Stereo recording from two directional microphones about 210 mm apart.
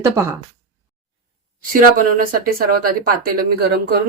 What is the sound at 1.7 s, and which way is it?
Speech, 40° right (ahead or behind).